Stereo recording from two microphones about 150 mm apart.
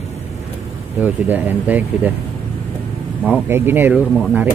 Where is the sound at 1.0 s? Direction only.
10° right (ahead or behind).